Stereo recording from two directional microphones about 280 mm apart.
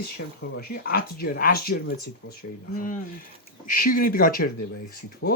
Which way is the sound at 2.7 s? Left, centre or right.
Left.